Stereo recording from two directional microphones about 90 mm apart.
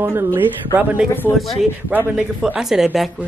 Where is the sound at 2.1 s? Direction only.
10° right (ahead or behind).